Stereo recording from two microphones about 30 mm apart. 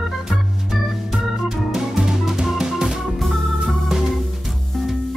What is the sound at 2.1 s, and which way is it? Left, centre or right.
Music, centre.